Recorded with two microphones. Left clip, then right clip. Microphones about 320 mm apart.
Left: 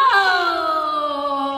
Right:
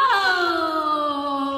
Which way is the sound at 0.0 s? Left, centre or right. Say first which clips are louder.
Left 3 dB; centre.